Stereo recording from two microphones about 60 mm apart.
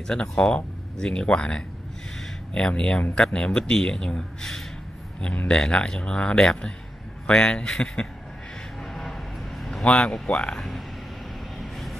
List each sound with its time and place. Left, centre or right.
0.0 s speech: centre
5.2 s speech: left
5.5 s speech: centre
8.8 s a sound: centre
9.8 s speech: centre
11.5 s vehicle: centre